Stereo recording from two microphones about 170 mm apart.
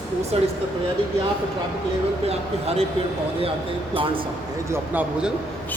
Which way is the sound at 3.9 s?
30° right (ahead or behind).